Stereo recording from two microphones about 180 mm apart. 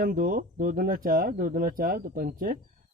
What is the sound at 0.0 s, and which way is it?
Speech, 50° right (ahead or behind).